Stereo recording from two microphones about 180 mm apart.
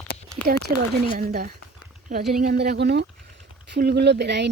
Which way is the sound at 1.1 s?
55° right (ahead or behind).